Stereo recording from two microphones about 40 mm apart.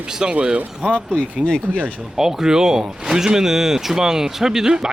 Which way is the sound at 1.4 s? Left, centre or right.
Left.